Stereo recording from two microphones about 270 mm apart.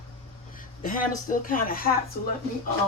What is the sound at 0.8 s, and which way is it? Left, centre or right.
Speech, left.